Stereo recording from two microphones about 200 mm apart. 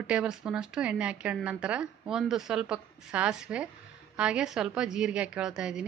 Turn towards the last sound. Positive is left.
turn(degrees=-5)  # may be behind; listen again after turning